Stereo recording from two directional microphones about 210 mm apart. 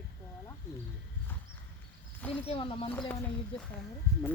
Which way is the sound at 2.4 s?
25° left (ahead or behind).